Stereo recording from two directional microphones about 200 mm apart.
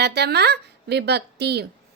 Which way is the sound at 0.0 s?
55° right (ahead or behind).